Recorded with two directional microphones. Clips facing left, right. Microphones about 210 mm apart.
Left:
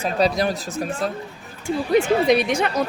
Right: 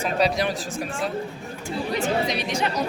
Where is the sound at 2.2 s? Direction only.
55° left (ahead or behind).